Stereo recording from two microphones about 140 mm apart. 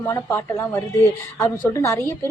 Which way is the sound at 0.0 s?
15° left (ahead or behind).